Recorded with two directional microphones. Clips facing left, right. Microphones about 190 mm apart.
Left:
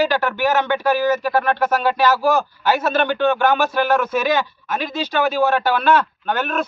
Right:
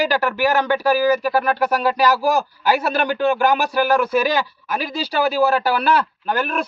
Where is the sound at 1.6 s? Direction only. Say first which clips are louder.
Even; 35° right (ahead or behind).